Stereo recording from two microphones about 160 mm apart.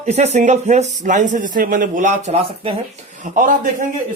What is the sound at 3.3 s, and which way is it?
Speech, 60° right (ahead or behind).